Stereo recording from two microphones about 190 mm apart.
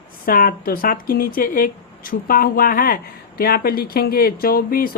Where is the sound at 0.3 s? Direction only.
50° left (ahead or behind).